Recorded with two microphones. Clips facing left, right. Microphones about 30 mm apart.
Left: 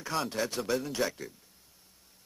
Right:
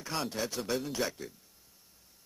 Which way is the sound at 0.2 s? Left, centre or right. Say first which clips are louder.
Left 2 dB; centre.